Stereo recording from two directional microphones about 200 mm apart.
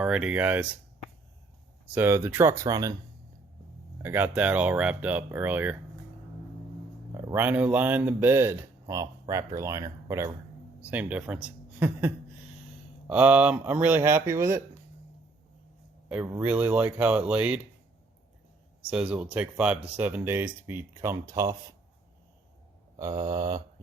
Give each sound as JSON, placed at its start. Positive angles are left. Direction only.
{"t": 0.0, "sound": "speech", "side_deg": -5}
{"t": 1.9, "sound": "speech", "side_deg": -10}
{"t": 4.0, "sound": "speech", "side_deg": -10}
{"t": 7.1, "sound": "speech", "side_deg": -15}
{"t": 16.0, "sound": "speech", "side_deg": -5}
{"t": 18.9, "sound": "speech", "side_deg": -5}
{"t": 23.0, "sound": "mantra", "side_deg": -20}